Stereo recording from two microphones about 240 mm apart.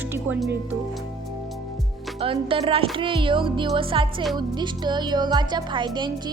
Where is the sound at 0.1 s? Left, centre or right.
Centre.